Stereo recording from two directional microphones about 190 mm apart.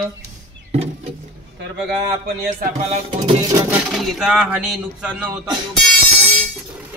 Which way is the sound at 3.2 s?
15° right (ahead or behind).